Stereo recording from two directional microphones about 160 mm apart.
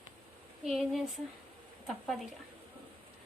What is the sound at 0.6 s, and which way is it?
Speech, centre (ahead or behind).